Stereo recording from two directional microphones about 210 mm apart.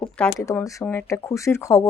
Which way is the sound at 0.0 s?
5° left (ahead or behind).